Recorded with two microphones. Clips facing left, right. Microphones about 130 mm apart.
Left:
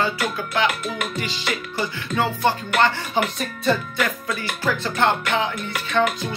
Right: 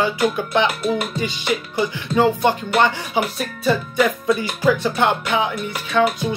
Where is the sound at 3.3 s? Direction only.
5° right (ahead or behind).